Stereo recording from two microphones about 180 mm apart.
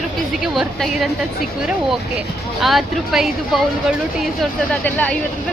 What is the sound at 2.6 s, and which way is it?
Speech, centre (ahead or behind).